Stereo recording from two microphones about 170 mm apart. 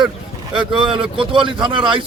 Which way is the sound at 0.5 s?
5° right (ahead or behind).